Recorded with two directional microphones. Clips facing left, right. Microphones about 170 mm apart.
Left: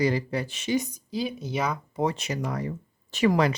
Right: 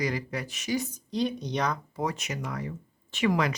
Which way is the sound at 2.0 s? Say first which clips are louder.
Left 4 dB; 30° left (ahead or behind).